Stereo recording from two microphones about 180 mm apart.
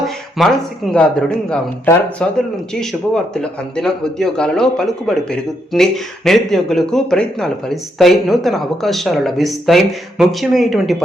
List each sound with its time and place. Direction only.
0.0 s speech: centre (ahead or behind)